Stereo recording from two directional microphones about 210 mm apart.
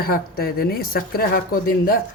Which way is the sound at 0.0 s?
45° left (ahead or behind).